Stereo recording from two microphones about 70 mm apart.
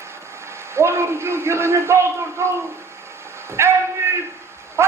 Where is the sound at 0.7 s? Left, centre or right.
Right.